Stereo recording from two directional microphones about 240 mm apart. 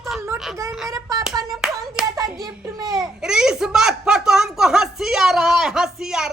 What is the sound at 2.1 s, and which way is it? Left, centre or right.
Speech, centre.